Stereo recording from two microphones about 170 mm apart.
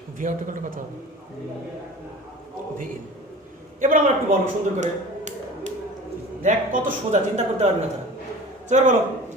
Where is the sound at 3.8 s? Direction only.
45° right (ahead or behind).